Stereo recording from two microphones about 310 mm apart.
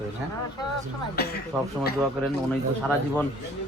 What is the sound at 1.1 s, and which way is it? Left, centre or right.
Speech, left.